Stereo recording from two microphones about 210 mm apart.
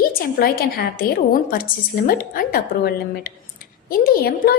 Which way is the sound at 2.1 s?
45° left (ahead or behind).